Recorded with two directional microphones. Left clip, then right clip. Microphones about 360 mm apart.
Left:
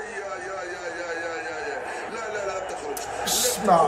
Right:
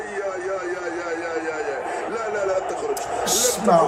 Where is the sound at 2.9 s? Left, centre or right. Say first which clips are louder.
Right 3 dB; centre.